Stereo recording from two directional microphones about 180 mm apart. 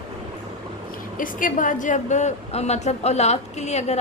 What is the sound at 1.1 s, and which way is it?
A woman's voice, 50° left (ahead or behind).